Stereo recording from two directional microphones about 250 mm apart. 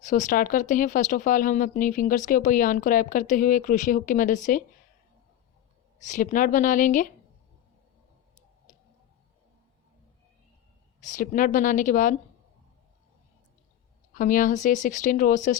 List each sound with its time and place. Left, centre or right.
0.0 s speech: left
6.0 s speech: left
11.0 s speech: left
14.1 s speech: left